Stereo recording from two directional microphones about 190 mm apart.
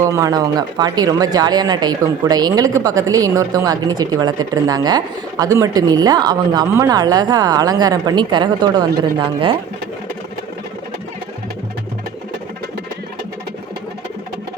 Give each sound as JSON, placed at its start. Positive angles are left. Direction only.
{"t": 0.0, "sound": "a woman's voice", "side_deg": -15}